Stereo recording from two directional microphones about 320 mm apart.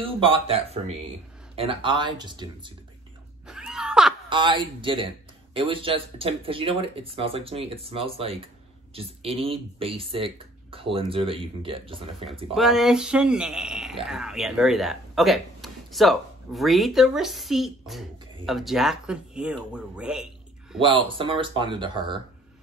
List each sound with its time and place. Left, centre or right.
0.0 s speech: centre
3.4 s a sound: centre
4.3 s speech: centre
12.5 s speech: centre
20.8 s speech: centre